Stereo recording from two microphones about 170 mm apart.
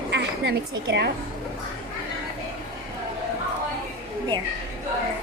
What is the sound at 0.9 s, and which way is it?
Speech, 80° right.